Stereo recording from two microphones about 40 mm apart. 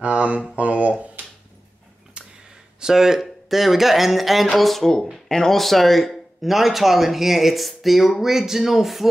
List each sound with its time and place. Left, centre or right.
0.0 s speech: right
2.2 s a sound: right
2.8 s speech: centre
5.3 s speech: centre
5.6 s speech: centre